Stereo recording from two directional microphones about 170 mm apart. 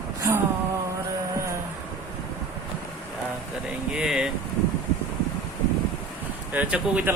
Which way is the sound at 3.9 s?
5° right (ahead or behind).